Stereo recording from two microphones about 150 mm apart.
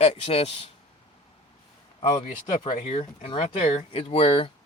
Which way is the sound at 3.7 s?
40° left (ahead or behind).